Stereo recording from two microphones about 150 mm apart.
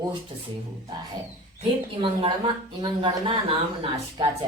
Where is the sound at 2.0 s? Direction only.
30° right (ahead or behind).